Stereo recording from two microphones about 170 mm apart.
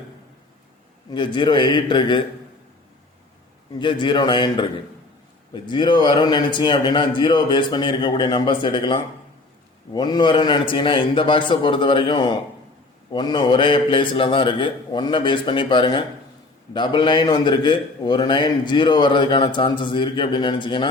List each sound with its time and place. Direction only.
1.1 s a man's voice: 25° left (ahead or behind)
3.8 s a man's voice: 25° left (ahead or behind)